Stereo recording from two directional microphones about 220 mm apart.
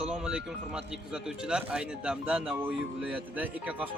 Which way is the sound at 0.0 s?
5° right (ahead or behind).